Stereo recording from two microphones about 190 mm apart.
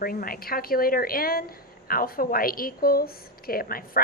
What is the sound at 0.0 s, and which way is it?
A woman's voice, 50° left (ahead or behind).